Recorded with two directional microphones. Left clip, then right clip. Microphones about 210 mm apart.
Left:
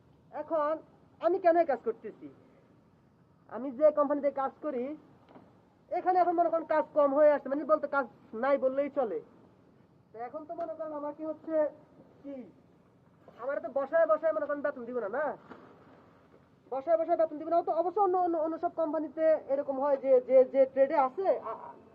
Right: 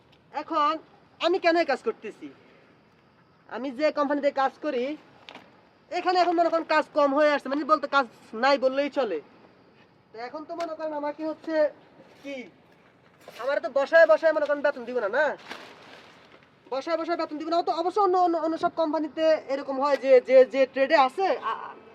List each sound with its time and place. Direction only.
0.3 s a man's voice: 50° right (ahead or behind)
3.5 s a man's voice: 40° right (ahead or behind)
5.9 s a man's voice: 55° right (ahead or behind)
13.4 s a man's voice: 40° right (ahead or behind)
16.6 s speech: 55° right (ahead or behind)